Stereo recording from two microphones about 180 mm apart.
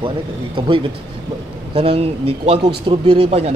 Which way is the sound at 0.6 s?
30° right (ahead or behind).